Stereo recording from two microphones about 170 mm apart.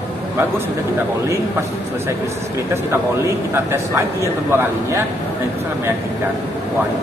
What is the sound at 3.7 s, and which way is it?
A man's voice, 15° right (ahead or behind).